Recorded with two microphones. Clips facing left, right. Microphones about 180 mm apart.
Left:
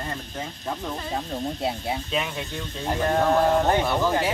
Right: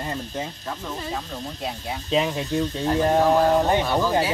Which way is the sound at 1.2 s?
25° left (ahead or behind).